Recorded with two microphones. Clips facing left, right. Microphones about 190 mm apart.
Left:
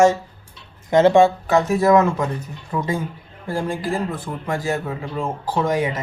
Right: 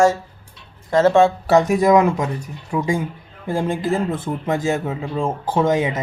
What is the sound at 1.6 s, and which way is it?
Speech, 15° right (ahead or behind).